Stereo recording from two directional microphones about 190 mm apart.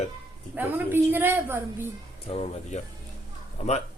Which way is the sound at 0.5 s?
10° right (ahead or behind).